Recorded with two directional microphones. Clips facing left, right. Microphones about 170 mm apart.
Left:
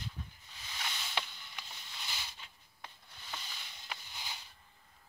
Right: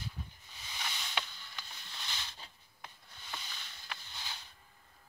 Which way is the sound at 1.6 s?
10° left (ahead or behind).